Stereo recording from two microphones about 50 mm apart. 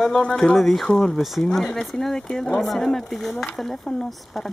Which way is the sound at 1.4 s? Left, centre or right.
Centre.